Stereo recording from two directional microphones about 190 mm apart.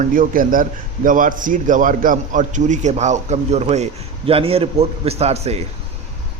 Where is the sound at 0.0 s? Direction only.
45° right (ahead or behind).